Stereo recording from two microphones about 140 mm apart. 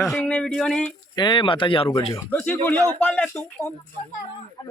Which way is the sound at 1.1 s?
35° left (ahead or behind).